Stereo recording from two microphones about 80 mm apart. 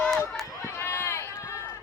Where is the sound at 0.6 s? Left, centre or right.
Left.